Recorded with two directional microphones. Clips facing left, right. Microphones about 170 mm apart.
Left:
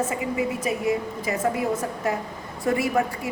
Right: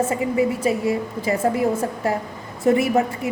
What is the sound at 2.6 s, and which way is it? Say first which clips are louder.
Speech: right 5 dB; 25° right (ahead or behind).